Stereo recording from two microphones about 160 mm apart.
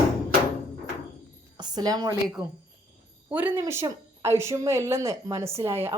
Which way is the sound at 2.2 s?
5° right (ahead or behind).